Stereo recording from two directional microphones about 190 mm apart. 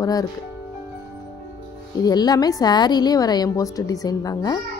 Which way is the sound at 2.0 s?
20° left (ahead or behind).